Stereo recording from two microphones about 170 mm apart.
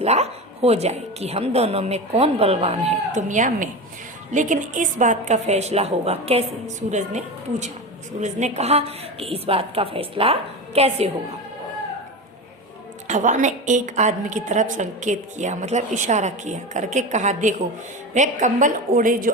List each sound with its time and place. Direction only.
0.0 s a woman's voice: 40° right (ahead or behind)
13.1 s a woman's voice: 45° right (ahead or behind)